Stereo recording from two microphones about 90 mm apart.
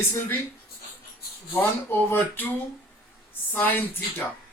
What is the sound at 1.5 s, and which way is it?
Speech, 25° left (ahead or behind).